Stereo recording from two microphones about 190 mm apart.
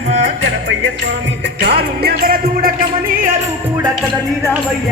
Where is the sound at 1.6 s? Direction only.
55° right (ahead or behind).